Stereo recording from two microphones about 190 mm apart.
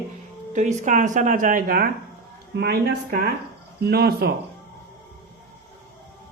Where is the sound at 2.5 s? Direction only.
60° right (ahead or behind).